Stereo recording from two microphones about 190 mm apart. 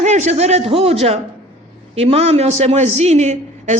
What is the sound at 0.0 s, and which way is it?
A man's voice, 40° right (ahead or behind).